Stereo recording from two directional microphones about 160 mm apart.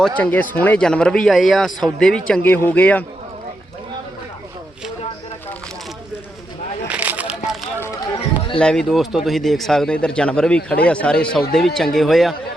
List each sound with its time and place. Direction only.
0.2 s a man's voice: 10° left (ahead or behind)
6.8 s a sound: 10° right (ahead or behind)
7.8 s run: 20° left (ahead or behind)
8.5 s a man's voice: 5° left (ahead or behind)